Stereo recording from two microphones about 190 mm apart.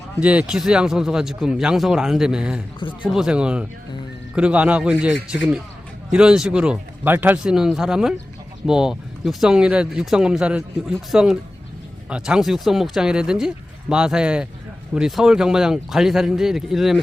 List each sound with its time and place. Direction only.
0.2 s speech: 5° right (ahead or behind)